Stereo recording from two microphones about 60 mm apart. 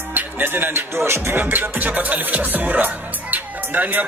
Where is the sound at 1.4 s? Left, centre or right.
Right.